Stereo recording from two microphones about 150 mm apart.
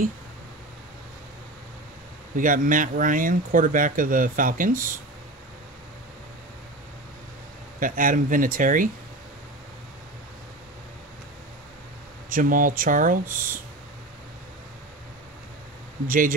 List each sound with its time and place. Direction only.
2.3 s speech: 65° right (ahead or behind)
7.8 s speech: 65° right (ahead or behind)
12.3 s speech: 65° right (ahead or behind)
16.1 s speech: 65° right (ahead or behind)